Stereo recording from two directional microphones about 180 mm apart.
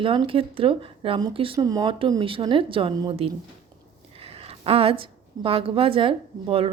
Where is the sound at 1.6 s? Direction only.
20° right (ahead or behind).